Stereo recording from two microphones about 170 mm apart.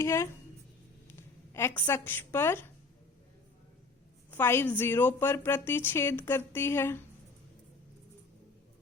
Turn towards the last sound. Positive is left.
turn(degrees=15)  # may be behind; listen again after turning